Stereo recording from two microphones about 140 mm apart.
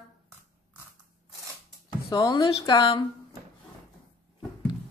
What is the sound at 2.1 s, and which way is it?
Speech, 30° left (ahead or behind).